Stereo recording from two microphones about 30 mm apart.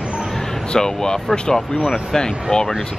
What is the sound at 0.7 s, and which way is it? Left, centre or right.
Speech, left.